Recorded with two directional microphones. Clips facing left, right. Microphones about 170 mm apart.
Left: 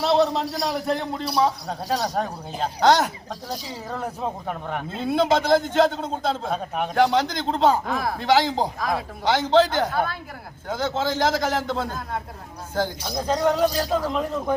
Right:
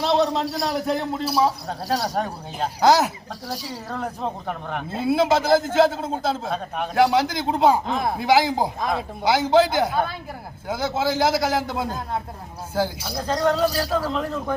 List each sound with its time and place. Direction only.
0.0 s a man's voice: centre (ahead or behind)
3.8 s a man's voice: 5° left (ahead or behind); by 7.8 s 10° right (ahead or behind)
7.9 s speech: 20° right (ahead or behind)
8.2 s a man's voice: 10° right (ahead or behind)
8.8 s speech: 25° right (ahead or behind)
9.2 s a man's voice: 10° right (ahead or behind)
13.1 s a man's voice: 10° left (ahead or behind)
13.7 s a man's voice: 10° right (ahead or behind)
13.9 s a man's voice: 15° left (ahead or behind)